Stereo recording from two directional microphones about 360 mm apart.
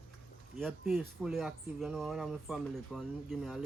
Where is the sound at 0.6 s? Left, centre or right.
Centre.